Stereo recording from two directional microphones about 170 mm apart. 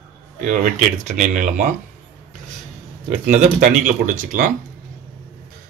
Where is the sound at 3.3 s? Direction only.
50° right (ahead or behind).